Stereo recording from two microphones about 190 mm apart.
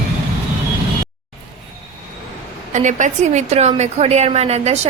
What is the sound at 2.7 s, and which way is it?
A woman's voice, 40° right (ahead or behind).